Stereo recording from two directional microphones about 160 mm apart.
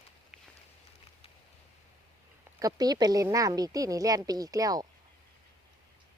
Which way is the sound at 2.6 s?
25° right (ahead or behind).